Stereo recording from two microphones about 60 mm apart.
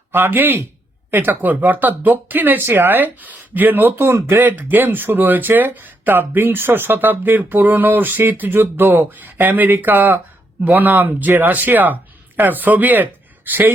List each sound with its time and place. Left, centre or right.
0.1 s speech: right
4.0 s speech: right
4.5 s speech: right